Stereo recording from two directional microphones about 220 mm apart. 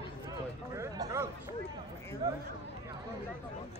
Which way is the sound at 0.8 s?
15° right (ahead or behind).